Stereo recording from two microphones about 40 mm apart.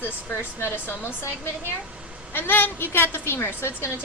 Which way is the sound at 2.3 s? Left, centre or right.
Left.